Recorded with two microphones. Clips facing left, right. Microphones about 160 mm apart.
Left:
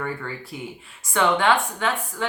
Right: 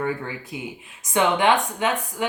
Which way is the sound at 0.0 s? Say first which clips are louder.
Right 3 dB; 15° right (ahead or behind).